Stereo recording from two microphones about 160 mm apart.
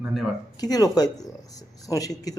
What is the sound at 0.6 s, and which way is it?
Speech, 25° left (ahead or behind).